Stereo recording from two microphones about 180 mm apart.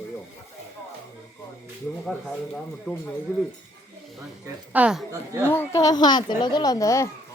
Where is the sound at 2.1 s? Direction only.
5° left (ahead or behind).